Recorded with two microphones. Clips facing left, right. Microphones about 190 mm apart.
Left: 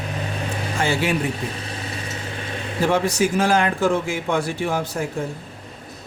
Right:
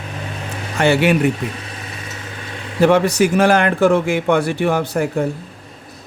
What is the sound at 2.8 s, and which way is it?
Speech, 65° right (ahead or behind).